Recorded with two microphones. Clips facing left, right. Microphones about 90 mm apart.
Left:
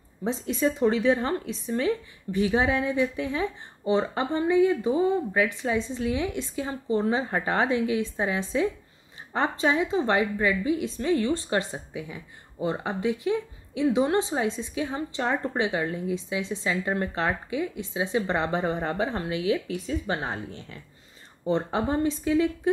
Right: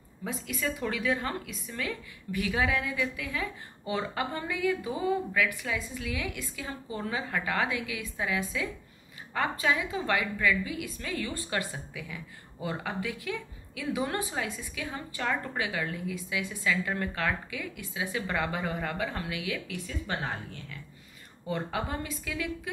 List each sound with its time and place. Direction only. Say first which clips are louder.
0.2 s a woman's voice: left 8 dB; 25° left (ahead or behind)